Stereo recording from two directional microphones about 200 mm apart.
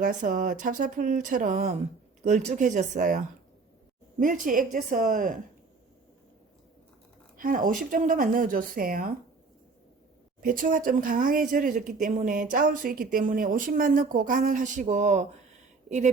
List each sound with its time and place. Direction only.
0.0 s speech: 40° right (ahead or behind)
7.3 s speech: 45° right (ahead or behind)
10.4 s speech: 45° right (ahead or behind)